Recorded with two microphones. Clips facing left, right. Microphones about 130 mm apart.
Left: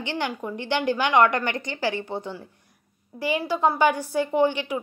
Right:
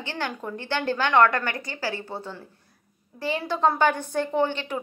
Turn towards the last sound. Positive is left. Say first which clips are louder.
# left 3 dB
turn(degrees=10)  # may be behind; listen again after turning